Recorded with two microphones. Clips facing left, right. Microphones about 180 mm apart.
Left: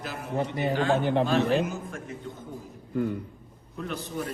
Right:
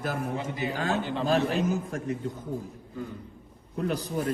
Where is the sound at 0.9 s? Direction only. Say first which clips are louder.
Left 5 dB; 60° left (ahead or behind).